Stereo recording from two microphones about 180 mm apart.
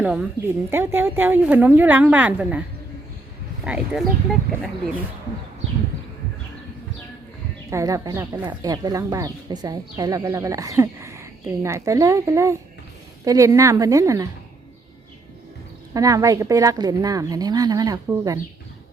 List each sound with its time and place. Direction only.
0.0 s speech: 5° right (ahead or behind)
7.7 s a woman's voice: 15° right (ahead or behind)
15.9 s a woman's voice: 20° right (ahead or behind)